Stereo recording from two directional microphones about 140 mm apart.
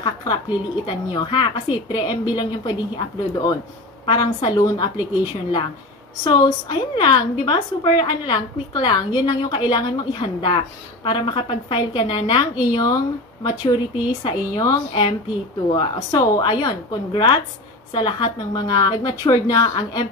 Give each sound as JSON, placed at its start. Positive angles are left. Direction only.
{"t": 0.0, "sound": "a sound", "side_deg": 30}
{"t": 0.8, "sound": "a woman's voice", "side_deg": 35}
{"t": 6.2, "sound": "a woman's voice", "side_deg": 35}